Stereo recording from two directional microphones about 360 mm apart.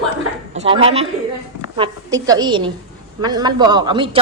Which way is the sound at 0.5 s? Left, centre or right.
Centre.